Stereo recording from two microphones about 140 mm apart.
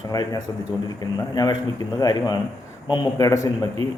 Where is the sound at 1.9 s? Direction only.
30° left (ahead or behind).